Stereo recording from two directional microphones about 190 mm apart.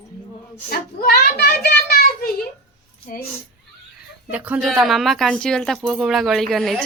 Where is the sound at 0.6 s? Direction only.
50° left (ahead or behind).